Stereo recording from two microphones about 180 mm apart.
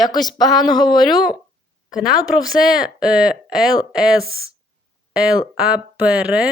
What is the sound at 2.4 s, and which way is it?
Speech, 5° right (ahead or behind).